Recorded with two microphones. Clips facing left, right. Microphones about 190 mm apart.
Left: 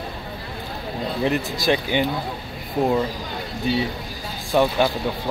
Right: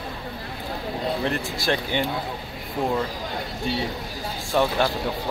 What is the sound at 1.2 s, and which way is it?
Speech, 5° left (ahead or behind).